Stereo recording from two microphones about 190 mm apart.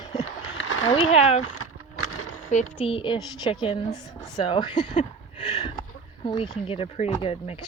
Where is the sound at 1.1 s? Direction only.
35° left (ahead or behind).